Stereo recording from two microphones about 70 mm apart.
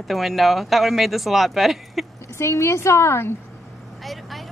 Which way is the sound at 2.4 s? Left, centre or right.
Left.